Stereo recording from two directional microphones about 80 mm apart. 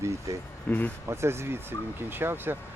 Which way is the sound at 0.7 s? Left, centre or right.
Left.